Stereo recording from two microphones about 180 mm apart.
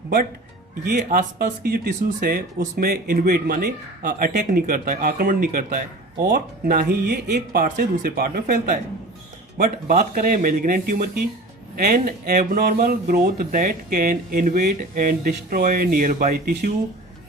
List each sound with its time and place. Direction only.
0.9 s speech: 60° right (ahead or behind)